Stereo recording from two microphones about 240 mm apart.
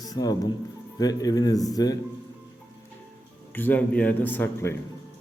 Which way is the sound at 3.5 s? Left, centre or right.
Centre.